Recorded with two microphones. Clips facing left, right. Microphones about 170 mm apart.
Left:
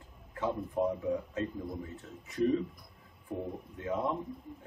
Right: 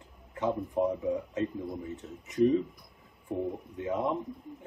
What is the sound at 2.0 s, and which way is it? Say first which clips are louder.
Speech: right 5 dB; 20° right (ahead or behind).